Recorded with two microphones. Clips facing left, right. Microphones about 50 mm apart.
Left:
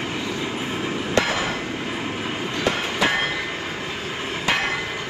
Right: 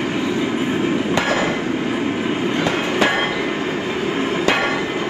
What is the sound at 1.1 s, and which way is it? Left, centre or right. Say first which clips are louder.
Hammer: left 1 dB; right.